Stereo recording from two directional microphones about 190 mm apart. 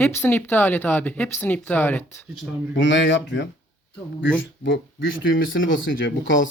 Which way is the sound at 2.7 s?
75° left (ahead or behind).